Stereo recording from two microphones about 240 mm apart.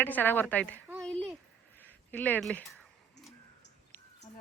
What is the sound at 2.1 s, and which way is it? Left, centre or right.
Speech, centre.